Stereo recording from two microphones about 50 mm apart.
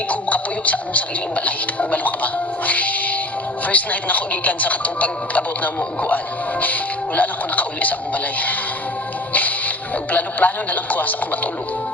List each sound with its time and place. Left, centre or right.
0.1 s speech: left